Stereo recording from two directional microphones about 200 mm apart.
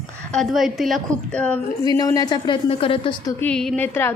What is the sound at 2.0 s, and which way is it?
A woman's voice, 20° left (ahead or behind).